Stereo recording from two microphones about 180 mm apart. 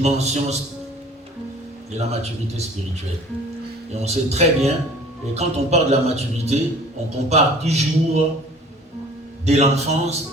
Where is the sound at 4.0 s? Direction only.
35° right (ahead or behind).